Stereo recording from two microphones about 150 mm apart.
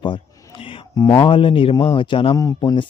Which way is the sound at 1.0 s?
35° left (ahead or behind).